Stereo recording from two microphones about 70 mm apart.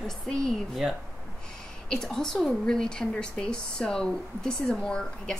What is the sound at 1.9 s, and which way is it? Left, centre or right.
A woman's voice, centre.